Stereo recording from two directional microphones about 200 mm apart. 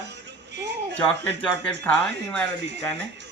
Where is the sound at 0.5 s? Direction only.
60° right (ahead or behind).